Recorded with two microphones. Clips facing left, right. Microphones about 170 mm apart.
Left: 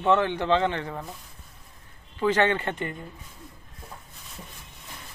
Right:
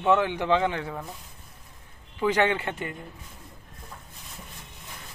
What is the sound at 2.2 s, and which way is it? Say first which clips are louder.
Speech: left 1 dB; 10° right (ahead or behind).